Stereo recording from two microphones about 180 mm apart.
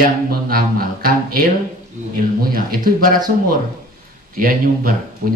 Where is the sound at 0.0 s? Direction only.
55° right (ahead or behind).